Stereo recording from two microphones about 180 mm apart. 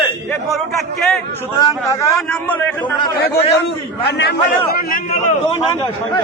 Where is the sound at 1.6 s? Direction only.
15° left (ahead or behind).